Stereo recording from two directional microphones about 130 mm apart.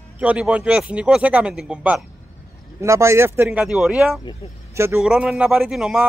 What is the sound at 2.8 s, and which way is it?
Speech, 20° right (ahead or behind).